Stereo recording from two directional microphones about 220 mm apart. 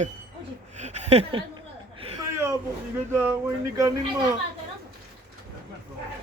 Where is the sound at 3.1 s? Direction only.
10° right (ahead or behind).